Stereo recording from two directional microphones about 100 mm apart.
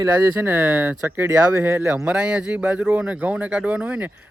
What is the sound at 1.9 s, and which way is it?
A man's voice, 10° right (ahead or behind).